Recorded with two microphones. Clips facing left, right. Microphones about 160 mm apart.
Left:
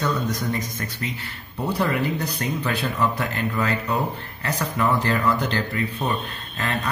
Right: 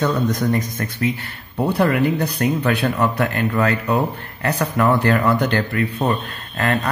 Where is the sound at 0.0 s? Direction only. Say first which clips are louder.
Right 6 dB; 60° right (ahead or behind).